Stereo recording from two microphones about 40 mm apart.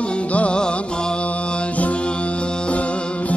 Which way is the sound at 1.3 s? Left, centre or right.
Left.